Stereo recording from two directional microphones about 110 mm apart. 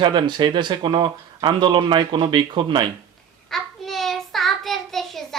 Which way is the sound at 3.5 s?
Centre (ahead or behind).